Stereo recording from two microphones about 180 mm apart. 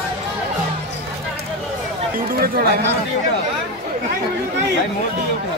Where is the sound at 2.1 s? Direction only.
55° right (ahead or behind).